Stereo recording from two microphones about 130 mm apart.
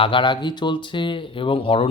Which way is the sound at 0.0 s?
40° left (ahead or behind).